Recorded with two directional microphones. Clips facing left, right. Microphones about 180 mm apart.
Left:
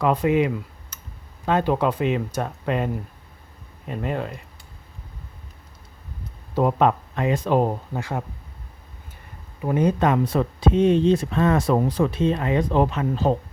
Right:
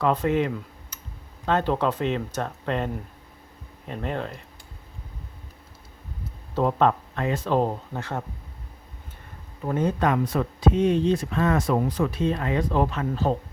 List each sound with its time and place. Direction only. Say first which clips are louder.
0.0 s speech: left 3 dB; 10° left (ahead or behind)
6.5 s speech: left 2 dB; 10° left (ahead or behind)
9.6 s speech: left 4 dB; 15° left (ahead or behind)